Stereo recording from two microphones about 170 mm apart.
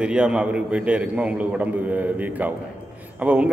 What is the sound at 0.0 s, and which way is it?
A man's voice, 5° right (ahead or behind).